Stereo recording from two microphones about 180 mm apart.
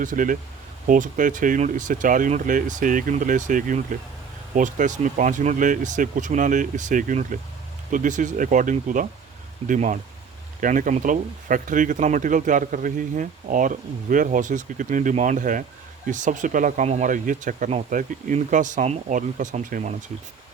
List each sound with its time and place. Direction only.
0.0 s speech: 50° right (ahead or behind)